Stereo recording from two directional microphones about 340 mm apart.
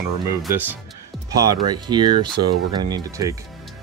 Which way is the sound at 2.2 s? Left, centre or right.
Right.